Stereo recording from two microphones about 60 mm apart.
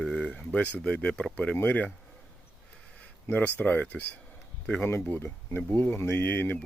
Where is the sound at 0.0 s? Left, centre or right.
Centre.